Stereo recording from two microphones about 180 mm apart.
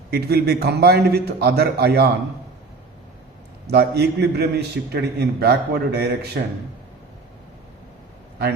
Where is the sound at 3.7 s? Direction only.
65° right (ahead or behind).